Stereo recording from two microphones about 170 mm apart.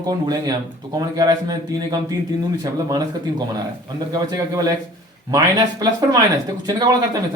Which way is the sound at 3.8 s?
25° right (ahead or behind).